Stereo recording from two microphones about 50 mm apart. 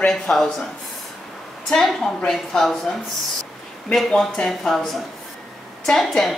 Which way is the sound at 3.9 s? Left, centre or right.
Centre.